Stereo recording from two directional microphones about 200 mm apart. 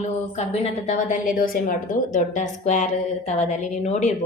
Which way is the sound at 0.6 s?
35° left (ahead or behind).